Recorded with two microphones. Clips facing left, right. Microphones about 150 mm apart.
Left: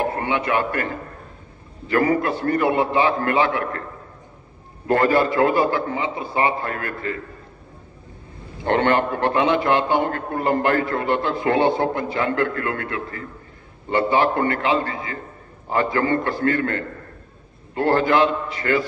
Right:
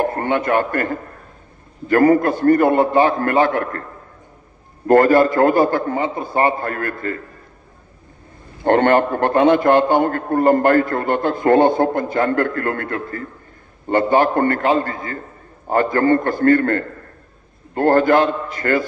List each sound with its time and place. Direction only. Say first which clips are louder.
0.0 s a man's voice: right 4 dB; 50° right (ahead or behind)
4.8 s a man's voice: right 6 dB; 45° right (ahead or behind)
8.6 s a man's voice: right 5 dB; 50° right (ahead or behind)